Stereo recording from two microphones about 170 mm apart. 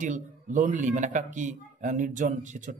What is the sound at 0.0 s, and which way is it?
Speech, 50° right (ahead or behind).